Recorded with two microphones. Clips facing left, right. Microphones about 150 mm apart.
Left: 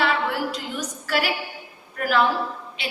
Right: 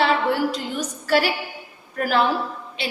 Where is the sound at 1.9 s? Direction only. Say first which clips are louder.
Right 1 dB; 35° right (ahead or behind).